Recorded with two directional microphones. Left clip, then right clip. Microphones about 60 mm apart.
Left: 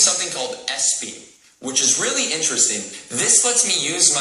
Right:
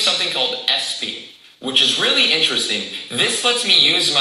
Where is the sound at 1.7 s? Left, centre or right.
Centre.